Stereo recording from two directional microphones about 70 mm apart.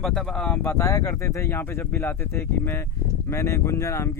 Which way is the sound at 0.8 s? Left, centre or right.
Left.